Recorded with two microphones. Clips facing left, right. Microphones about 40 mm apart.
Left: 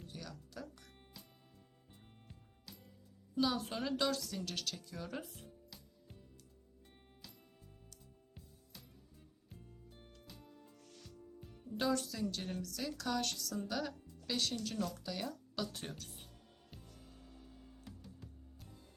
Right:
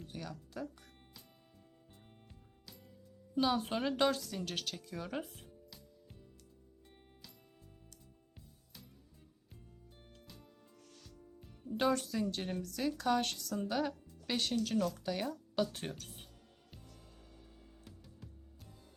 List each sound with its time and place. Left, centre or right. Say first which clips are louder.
0.1 s music: right 5 dB; right
1.9 s music: left 2 dB; centre
3.4 s a woman's voice: right 3 dB; right
4.2 s speech: right 2 dB; centre
5.5 s music: right 1 dB; centre
10.2 s music: even; centre
11.8 s a woman's voice: right 3 dB; right